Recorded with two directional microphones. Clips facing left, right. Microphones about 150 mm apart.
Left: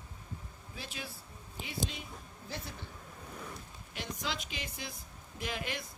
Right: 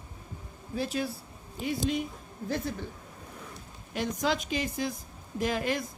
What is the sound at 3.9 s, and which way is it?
Speech, 45° right (ahead or behind).